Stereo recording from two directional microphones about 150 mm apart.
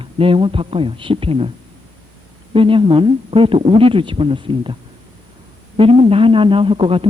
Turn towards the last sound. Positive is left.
turn(degrees=-35)  # may be behind; listen again after turning